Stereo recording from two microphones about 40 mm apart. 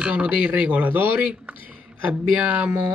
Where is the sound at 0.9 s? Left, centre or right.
Right.